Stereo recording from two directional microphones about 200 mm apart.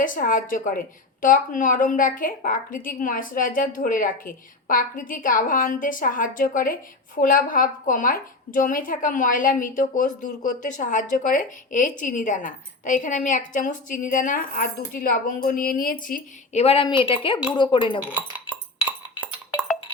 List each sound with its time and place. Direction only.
0.0 s a woman's voice: 40° left (ahead or behind); by 18.0 s 25° left (ahead or behind)
18.1 s music: 5° right (ahead or behind)